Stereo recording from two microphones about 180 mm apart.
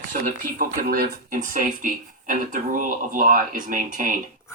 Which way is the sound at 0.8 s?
55° right (ahead or behind).